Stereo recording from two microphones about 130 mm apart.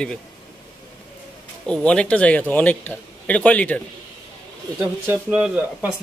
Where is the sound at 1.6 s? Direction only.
5° left (ahead or behind).